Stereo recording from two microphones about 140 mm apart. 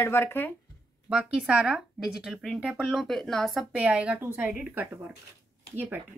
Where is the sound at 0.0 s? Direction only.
15° left (ahead or behind).